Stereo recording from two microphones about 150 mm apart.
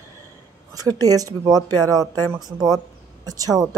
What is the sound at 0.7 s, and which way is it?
Speech, 25° right (ahead or behind).